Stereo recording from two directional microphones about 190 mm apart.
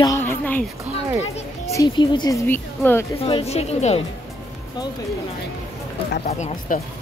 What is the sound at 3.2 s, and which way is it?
Speech, 30° left (ahead or behind).